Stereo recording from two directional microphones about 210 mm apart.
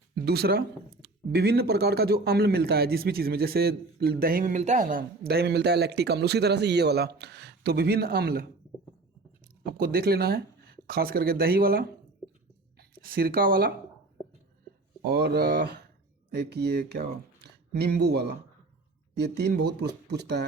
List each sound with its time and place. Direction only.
0.3 s speech: 50° right (ahead or behind)
9.6 s speech: 45° right (ahead or behind)
12.9 s speech: 45° right (ahead or behind)
15.0 s speech: 50° right (ahead or behind)